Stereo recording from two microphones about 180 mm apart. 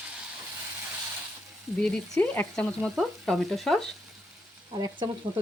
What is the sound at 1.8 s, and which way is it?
Frying, 5° left (ahead or behind).